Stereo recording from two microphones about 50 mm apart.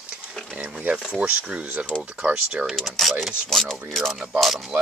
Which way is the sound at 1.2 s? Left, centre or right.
Right.